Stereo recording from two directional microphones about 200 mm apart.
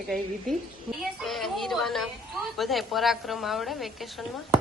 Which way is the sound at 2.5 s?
Centre (ahead or behind).